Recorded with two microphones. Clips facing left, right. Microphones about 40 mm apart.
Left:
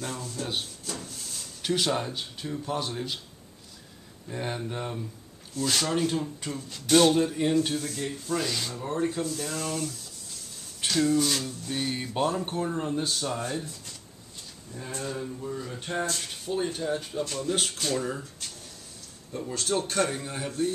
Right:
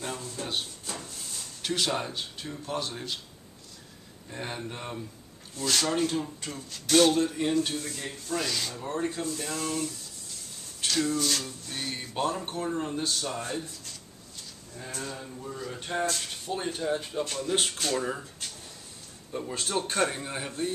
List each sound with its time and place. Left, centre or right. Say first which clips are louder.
0.0 s a sound: left 1 dB; centre
0.8 s speech: left 1 dB; centre
4.3 s speech: left 3 dB; centre
9.2 s speech: left 1 dB; centre
14.9 s speech: left 3 dB; centre
15.1 s speech: left 4 dB; centre
19.3 s speech: left 2 dB; centre